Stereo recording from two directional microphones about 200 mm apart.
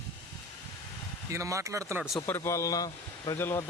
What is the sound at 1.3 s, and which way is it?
Speech, 15° right (ahead or behind).